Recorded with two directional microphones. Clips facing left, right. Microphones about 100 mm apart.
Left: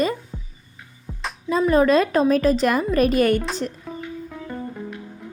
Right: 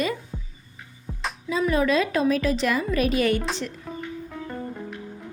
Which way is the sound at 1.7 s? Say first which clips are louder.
Left 6 dB; 45° left (ahead or behind).